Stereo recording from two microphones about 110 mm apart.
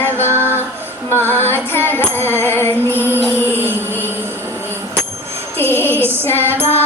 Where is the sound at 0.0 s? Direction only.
20° left (ahead or behind).